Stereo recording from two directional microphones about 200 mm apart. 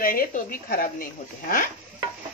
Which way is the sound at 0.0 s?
45° left (ahead or behind).